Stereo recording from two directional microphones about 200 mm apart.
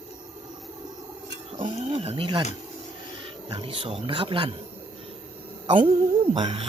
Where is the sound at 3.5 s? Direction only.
25° right (ahead or behind).